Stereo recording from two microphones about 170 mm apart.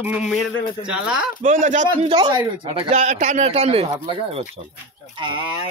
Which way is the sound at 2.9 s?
45° right (ahead or behind).